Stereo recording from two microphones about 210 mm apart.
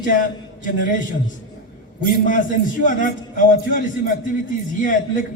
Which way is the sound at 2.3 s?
40° left (ahead or behind).